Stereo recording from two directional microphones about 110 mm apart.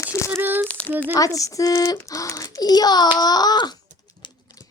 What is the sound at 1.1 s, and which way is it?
A woman's voice, 30° left (ahead or behind).